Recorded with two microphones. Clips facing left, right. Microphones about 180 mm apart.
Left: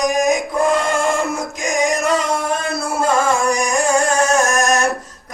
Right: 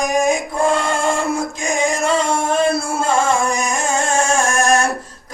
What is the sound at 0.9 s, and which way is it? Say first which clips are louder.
Music: even; 30° right (ahead or behind).